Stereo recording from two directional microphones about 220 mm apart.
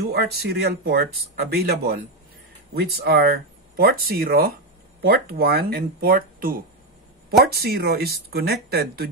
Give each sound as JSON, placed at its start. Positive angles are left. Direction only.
{"t": 0.1, "sound": "speech", "side_deg": -45}